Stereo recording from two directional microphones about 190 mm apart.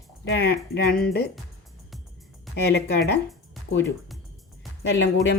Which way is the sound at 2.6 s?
60° left (ahead or behind).